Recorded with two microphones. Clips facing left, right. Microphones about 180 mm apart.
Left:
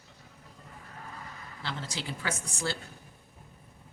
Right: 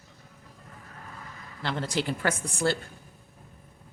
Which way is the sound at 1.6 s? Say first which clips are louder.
Right 9 dB; 55° right (ahead or behind).